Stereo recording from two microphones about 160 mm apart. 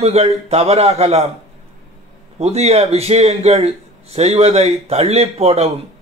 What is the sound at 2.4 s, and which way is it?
A man's voice, 40° right (ahead or behind).